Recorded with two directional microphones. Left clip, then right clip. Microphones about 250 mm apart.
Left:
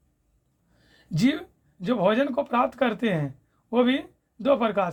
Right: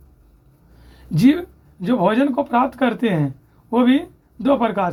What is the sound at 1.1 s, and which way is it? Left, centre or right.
Speech, left.